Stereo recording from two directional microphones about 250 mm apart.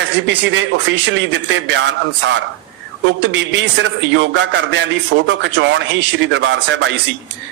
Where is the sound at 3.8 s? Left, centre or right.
Right.